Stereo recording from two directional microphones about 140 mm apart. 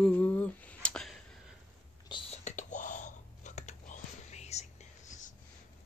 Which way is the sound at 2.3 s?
55° left (ahead or behind).